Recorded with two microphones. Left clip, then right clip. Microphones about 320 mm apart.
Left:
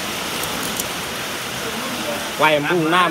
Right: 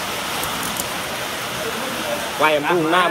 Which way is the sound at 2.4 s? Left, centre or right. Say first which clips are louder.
Left 1 dB; left.